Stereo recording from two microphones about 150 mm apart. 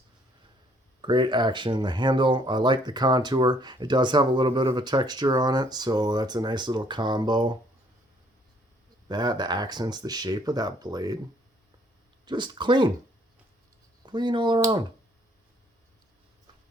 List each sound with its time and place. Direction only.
1.0 s speech: 30° right (ahead or behind)
9.0 s speech: 30° right (ahead or behind)
12.2 s speech: 30° right (ahead or behind)
14.0 s speech: 30° right (ahead or behind)